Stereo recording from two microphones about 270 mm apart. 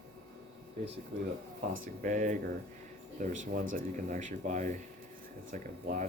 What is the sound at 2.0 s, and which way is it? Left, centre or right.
Speech, right.